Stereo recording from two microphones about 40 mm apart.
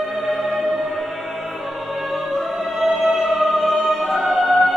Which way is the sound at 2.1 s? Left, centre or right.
Centre.